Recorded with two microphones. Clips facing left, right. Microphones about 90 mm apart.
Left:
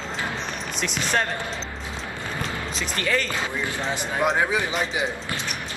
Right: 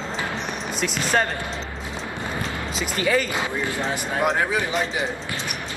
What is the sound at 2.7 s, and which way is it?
Speech, 10° right (ahead or behind).